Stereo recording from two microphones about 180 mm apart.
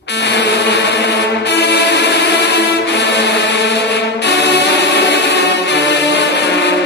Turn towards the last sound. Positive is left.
turn(degrees=70)  # may be behind; listen again after turning